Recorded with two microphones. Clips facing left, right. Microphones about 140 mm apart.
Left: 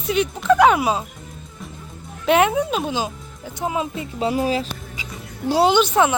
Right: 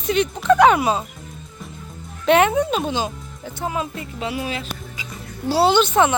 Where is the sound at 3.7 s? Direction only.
20° left (ahead or behind).